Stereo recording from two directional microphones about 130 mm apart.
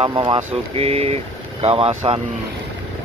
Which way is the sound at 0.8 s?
50° right (ahead or behind).